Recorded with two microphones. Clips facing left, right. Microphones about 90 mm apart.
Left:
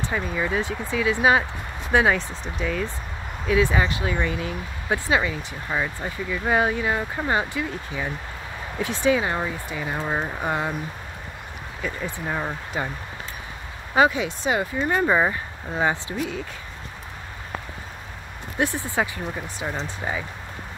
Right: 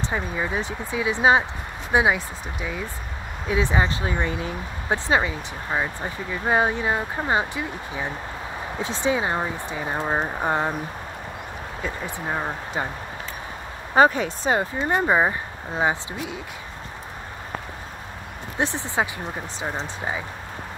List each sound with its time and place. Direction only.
0.1 s speech: 25° right (ahead or behind)
3.4 s speech: 25° right (ahead or behind)
11.8 s speech: 20° right (ahead or behind)
13.9 s speech: 45° right (ahead or behind); by 16.3 s 20° right (ahead or behind)
18.6 s speech: 20° right (ahead or behind)